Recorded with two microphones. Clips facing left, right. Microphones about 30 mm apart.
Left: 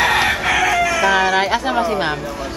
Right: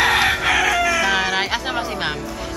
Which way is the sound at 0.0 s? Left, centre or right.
Centre.